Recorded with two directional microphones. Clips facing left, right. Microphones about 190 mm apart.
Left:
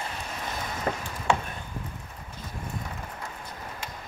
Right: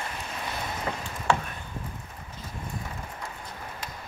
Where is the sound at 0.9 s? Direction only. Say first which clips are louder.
Left 5 dB; 45° left (ahead or behind).